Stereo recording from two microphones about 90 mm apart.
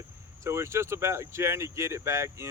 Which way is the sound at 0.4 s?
30° right (ahead or behind).